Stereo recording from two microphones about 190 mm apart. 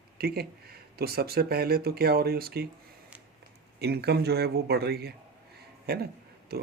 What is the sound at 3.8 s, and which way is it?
A man's voice, 60° right (ahead or behind).